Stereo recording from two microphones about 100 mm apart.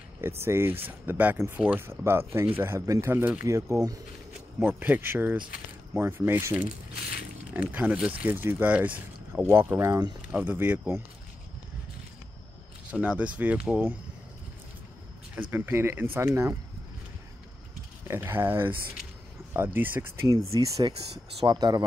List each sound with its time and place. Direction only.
0.4 s speech: 25° right (ahead or behind)
4.6 s speech: 20° right (ahead or behind); by 10.1 s 35° right (ahead or behind)
10.3 s speech: 15° right (ahead or behind)
12.9 s speech: 10° right (ahead or behind)
15.3 s speech: 20° right (ahead or behind)
18.0 s speech: 25° right (ahead or behind)
20.8 s speech: 50° right (ahead or behind)